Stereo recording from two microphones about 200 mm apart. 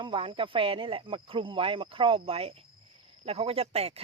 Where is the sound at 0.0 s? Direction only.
25° right (ahead or behind).